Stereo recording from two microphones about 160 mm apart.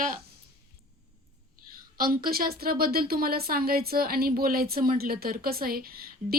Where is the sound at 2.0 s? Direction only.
65° right (ahead or behind).